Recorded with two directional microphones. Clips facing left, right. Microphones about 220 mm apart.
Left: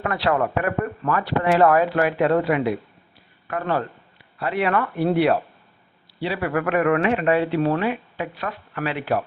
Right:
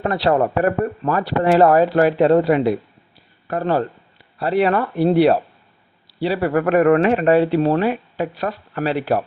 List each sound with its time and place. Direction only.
0.0 s speech: 30° right (ahead or behind)